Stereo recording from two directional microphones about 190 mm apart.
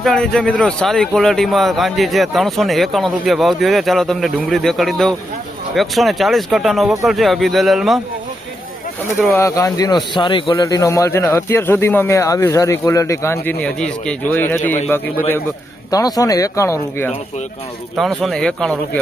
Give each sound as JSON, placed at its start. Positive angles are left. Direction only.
{"t": 0.0, "sound": "speech", "side_deg": 5}
{"t": 9.4, "sound": "a man's voice", "side_deg": 15}
{"t": 17.9, "sound": "speech", "side_deg": 0}